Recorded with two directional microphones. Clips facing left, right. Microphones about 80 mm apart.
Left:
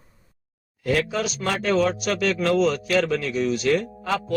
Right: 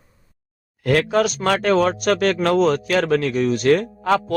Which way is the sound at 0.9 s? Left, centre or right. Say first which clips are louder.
Right 6 dB; right.